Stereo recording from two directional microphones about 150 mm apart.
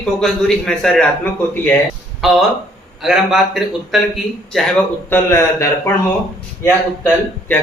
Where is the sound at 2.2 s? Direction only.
Centre (ahead or behind).